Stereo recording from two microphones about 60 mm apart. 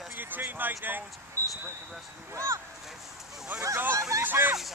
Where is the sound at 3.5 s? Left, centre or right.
Right.